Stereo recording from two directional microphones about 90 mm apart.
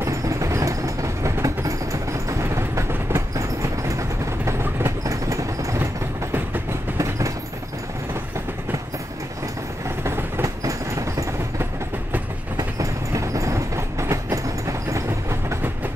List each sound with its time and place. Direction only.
0.0 s train: 35° right (ahead or behind)
4.5 s vehicle: 30° right (ahead or behind)
7.0 s train: 35° right (ahead or behind)
10.0 s train: 25° right (ahead or behind)